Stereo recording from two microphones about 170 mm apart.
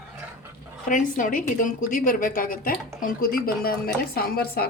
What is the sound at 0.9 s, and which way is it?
A woman's voice, 50° left (ahead or behind).